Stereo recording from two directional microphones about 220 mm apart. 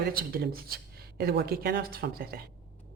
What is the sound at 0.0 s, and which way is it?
A woman's voice, 45° right (ahead or behind).